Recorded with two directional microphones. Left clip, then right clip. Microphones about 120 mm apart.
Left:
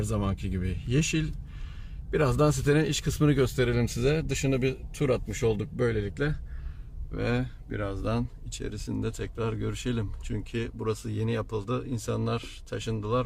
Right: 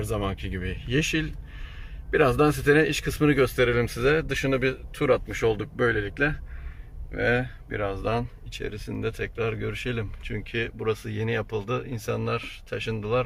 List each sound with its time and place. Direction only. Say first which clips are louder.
0.1 s speech: right 3 dB; 40° left (ahead or behind)
2.0 s speech: right 5 dB; 25° left (ahead or behind)
2.6 s speech: right 5 dB; 40° left (ahead or behind)
3.0 s speech: right 3 dB; 20° left (ahead or behind)
3.2 s speech: right 5 dB; 35° left (ahead or behind)
5.7 s speech: right 4 dB; 20° left (ahead or behind)
7.1 s speech: right 7 dB; 40° left (ahead or behind)